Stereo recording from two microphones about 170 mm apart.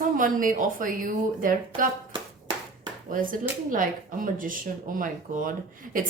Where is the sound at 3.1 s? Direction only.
55° right (ahead or behind).